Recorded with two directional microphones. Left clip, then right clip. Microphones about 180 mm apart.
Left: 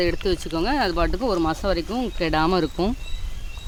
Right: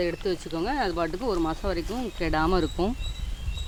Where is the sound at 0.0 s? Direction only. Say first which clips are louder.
Left 5 dB; 45° left (ahead or behind).